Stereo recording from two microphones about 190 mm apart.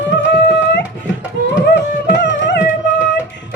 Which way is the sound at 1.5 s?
70° left (ahead or behind).